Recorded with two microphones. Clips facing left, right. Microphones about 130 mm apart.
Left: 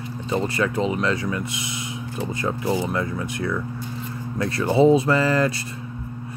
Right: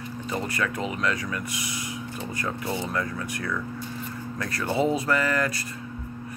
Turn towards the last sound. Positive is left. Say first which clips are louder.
# left 5 dB
turn(degrees=25)  # may be behind; listen again after turning